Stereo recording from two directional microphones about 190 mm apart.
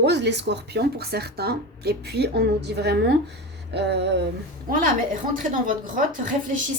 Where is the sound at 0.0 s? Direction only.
65° right (ahead or behind).